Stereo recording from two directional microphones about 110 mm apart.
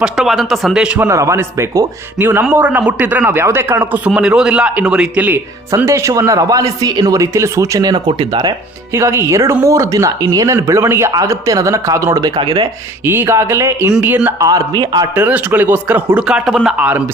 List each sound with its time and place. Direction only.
0.0 s speech: 5° right (ahead or behind)
0.9 s a man's voice: 25° right (ahead or behind)
12.4 s speech: 45° right (ahead or behind)
13.1 s a man's voice: 20° right (ahead or behind)
14.4 s a man's voice: 35° right (ahead or behind)
15.1 s speech: 15° right (ahead or behind)